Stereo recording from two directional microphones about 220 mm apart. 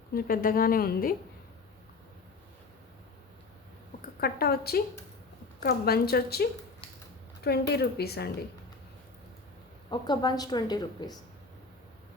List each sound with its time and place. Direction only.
0.1 s a woman's voice: 40° left (ahead or behind)
4.0 s a woman's voice: 45° left (ahead or behind)
7.7 s a woman's voice: 45° left (ahead or behind)
9.9 s a woman's voice: 20° left (ahead or behind)